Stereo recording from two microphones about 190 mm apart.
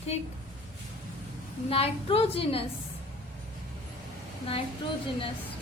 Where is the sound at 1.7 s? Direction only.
30° left (ahead or behind).